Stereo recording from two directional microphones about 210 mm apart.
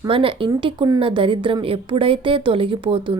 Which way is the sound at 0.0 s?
25° right (ahead or behind).